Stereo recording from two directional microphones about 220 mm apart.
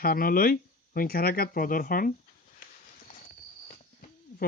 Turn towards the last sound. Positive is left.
turn(degrees=35)  # may be behind; listen again after turning